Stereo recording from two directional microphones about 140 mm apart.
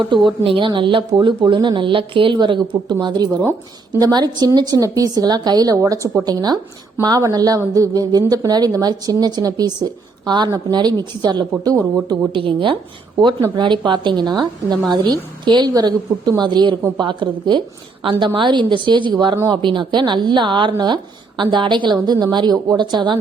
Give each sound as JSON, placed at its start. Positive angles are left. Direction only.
{"t": 0.3, "sound": "a woman's voice", "side_deg": -35}